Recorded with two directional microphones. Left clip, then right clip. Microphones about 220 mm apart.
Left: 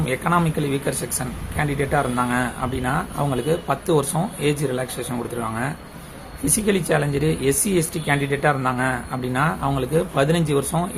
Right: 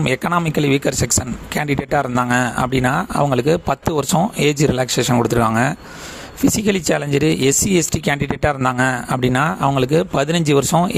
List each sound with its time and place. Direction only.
0.0 s speech: 45° right (ahead or behind)